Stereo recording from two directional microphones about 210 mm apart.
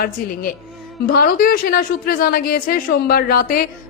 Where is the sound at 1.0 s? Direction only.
45° left (ahead or behind).